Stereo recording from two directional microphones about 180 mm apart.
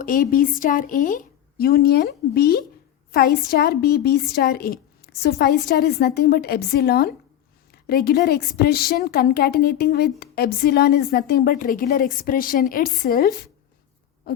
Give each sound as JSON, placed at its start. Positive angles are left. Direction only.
{"t": 0.0, "sound": "a woman's voice", "side_deg": 50}